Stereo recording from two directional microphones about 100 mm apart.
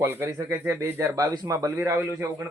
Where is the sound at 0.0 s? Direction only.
25° right (ahead or behind).